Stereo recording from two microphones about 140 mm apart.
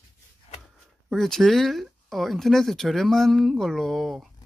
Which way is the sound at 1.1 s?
Centre (ahead or behind).